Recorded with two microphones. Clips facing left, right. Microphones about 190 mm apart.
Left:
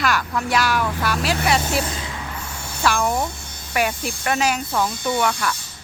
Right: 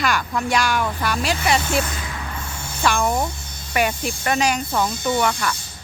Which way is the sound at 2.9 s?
Centre (ahead or behind).